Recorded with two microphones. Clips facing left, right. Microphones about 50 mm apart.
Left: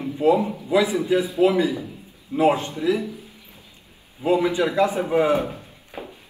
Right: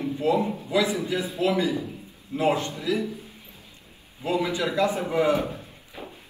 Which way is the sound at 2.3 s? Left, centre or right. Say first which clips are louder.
Left 5 dB; centre.